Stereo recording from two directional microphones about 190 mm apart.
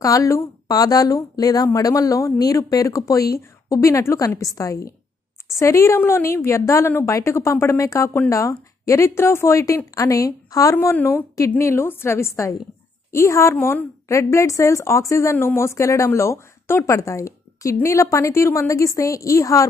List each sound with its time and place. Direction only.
0.0 s a woman's voice: 15° left (ahead or behind)